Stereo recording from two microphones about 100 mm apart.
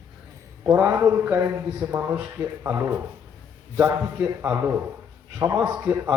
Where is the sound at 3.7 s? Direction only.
15° right (ahead or behind).